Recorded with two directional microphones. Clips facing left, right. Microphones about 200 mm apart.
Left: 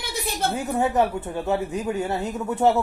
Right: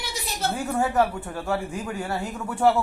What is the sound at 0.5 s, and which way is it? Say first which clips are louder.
Speech: left 1 dB; 20° left (ahead or behind).